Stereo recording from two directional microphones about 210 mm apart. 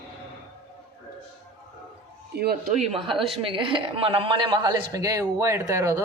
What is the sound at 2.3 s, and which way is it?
Speech, 45° right (ahead or behind).